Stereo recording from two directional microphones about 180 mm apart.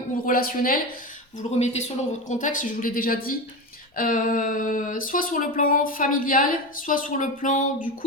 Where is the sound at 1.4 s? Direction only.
40° left (ahead or behind).